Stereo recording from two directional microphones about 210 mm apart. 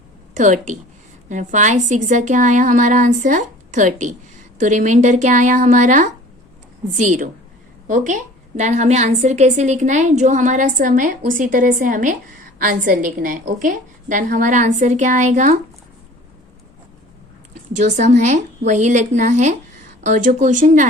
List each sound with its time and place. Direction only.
0.3 s a woman's voice: 35° right (ahead or behind)
17.7 s a woman's voice: 35° right (ahead or behind)